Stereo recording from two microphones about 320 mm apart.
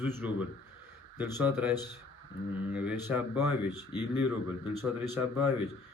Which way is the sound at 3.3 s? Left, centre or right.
Left.